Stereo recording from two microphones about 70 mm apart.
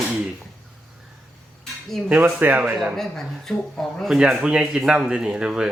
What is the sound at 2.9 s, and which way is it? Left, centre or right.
Speech, centre.